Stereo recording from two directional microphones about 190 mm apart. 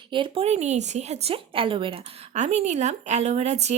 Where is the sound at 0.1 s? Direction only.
25° right (ahead or behind).